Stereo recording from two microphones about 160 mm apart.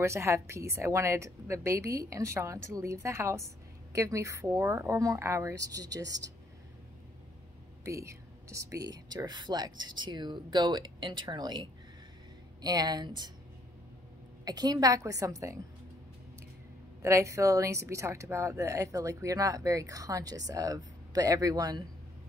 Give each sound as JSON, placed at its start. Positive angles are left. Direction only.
{"t": 0.0, "sound": "a woman's voice", "side_deg": -15}
{"t": 7.8, "sound": "a woman's voice", "side_deg": -20}
{"t": 14.4, "sound": "a woman's voice", "side_deg": -25}
{"t": 17.0, "sound": "a woman's voice", "side_deg": -20}